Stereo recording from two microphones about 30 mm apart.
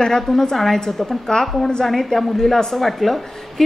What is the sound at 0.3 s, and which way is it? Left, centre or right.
Speech, centre.